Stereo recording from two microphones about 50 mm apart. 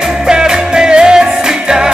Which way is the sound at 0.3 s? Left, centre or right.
Centre.